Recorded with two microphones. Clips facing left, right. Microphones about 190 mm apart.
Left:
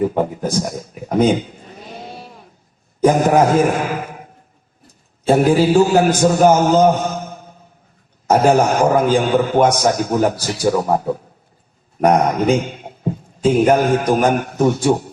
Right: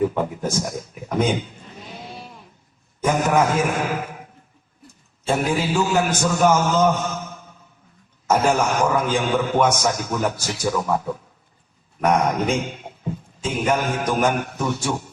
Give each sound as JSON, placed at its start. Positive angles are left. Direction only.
{"t": 3.0, "sound": "a man's voice", "side_deg": 35}
{"t": 5.2, "sound": "a man's voice", "side_deg": 35}
{"t": 7.1, "sound": "a sound", "side_deg": 35}
{"t": 8.3, "sound": "a man's voice", "side_deg": 35}